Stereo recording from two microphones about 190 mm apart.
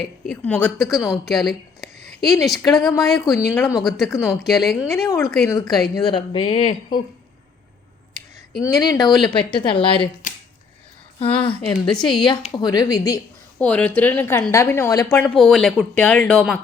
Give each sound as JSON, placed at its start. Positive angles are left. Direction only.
{"t": 0.3, "sound": "a woman's voice", "side_deg": 5}
{"t": 3.5, "sound": "speech", "side_deg": 15}
{"t": 3.8, "sound": "speech", "side_deg": 0}
{"t": 4.1, "sound": "speech", "side_deg": 15}
{"t": 4.4, "sound": "speech", "side_deg": 0}
{"t": 5.0, "sound": "a woman's voice", "side_deg": 15}
{"t": 8.6, "sound": "speech", "side_deg": 15}
{"t": 9.0, "sound": "speech", "side_deg": 0}
{"t": 9.6, "sound": "a woman's voice", "side_deg": 25}
{"t": 11.2, "sound": "a woman's voice", "side_deg": 30}
{"t": 13.6, "sound": "speech", "side_deg": 5}